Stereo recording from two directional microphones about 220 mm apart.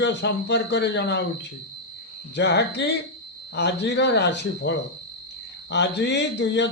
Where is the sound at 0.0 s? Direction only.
55° left (ahead or behind).